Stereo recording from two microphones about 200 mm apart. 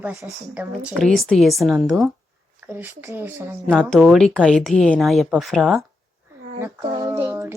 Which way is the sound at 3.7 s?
Centre (ahead or behind).